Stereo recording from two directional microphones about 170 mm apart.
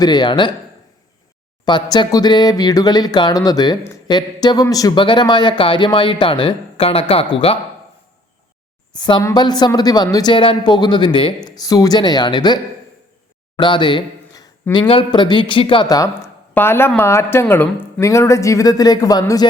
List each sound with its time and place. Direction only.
0.0 s speech: 25° left (ahead or behind)
1.6 s speech: 25° left (ahead or behind)
8.9 s speech: 25° left (ahead or behind)
13.6 s speech: 30° left (ahead or behind)